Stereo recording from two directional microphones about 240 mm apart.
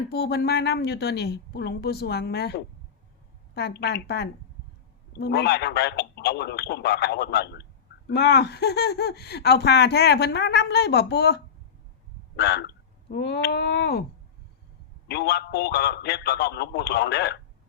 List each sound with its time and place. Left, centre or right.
0.1 s a man's voice: left
12.4 s speech: left
15.0 s a man's voice: left